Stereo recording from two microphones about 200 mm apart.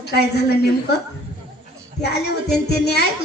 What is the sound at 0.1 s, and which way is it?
Speech, 55° left (ahead or behind).